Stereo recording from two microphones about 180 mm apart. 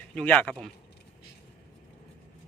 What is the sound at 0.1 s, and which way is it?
Speech, 5° left (ahead or behind).